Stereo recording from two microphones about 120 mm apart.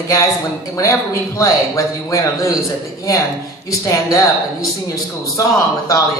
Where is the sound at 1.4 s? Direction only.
25° left (ahead or behind).